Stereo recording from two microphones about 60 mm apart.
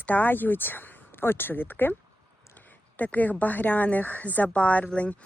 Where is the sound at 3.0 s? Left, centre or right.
Left.